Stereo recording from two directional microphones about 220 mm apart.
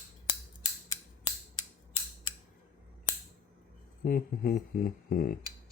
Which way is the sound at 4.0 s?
40° left (ahead or behind).